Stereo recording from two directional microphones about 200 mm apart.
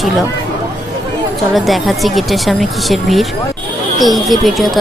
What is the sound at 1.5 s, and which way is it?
Speech, centre (ahead or behind).